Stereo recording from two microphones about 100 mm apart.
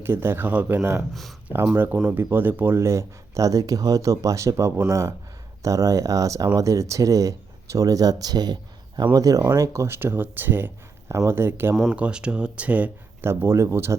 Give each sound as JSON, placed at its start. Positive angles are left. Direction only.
{"t": 0.0, "sound": "speech", "side_deg": -25}
{"t": 1.1, "sound": "speech", "side_deg": 0}
{"t": 1.5, "sound": "speech", "side_deg": -20}
{"t": 11.8, "sound": "speech", "side_deg": -10}